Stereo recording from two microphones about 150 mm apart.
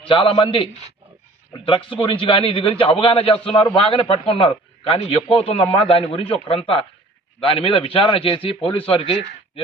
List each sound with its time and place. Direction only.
0.1 s a man's voice: 35° left (ahead or behind)